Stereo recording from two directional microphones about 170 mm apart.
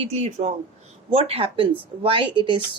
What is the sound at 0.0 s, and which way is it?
Speech, 40° right (ahead or behind).